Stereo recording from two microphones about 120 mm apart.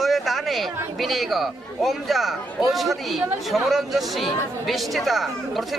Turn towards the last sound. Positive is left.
turn(degrees=0)  # may be behind; listen again after turning